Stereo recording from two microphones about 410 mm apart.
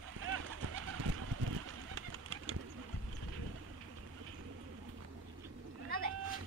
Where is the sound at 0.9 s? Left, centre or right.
Right.